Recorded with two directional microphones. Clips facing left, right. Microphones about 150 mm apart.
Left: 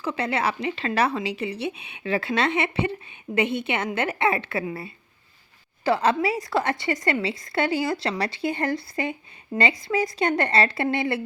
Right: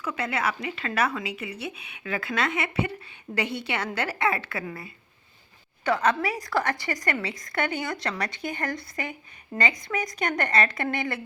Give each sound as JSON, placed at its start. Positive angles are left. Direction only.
{"t": 0.0, "sound": "speech", "side_deg": 30}